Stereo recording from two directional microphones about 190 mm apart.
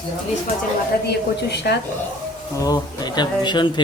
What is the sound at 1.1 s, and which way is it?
Speech, 60° left (ahead or behind).